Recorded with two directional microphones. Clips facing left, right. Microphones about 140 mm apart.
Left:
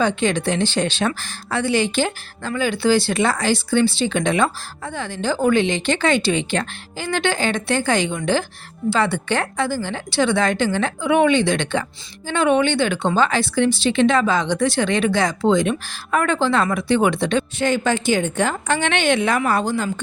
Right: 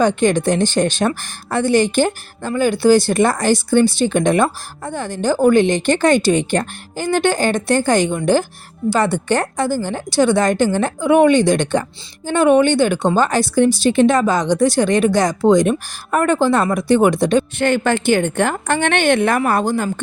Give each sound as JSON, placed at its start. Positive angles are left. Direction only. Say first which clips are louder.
{"t": 0.0, "sound": "a woman's voice", "louder": "right 5 dB", "side_deg": -50}
{"t": 17.6, "sound": "a woman's voice", "louder": "right 3 dB", "side_deg": -60}